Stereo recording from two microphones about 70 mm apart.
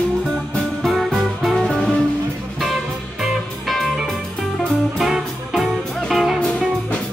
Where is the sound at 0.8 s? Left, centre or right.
Centre.